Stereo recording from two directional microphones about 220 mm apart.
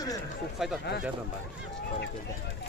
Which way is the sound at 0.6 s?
Centre (ahead or behind).